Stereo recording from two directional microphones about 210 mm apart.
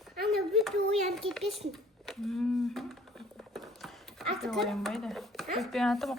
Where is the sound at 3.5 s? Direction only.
Centre (ahead or behind).